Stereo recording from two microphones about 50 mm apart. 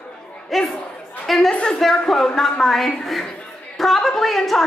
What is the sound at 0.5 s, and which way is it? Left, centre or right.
Speech, centre.